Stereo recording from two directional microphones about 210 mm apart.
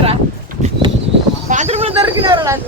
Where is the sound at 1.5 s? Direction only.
35° right (ahead or behind).